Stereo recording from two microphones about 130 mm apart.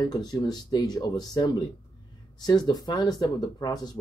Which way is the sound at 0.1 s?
30° left (ahead or behind).